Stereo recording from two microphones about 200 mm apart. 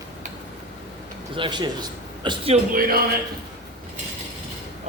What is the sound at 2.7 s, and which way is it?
Speech, 45° right (ahead or behind).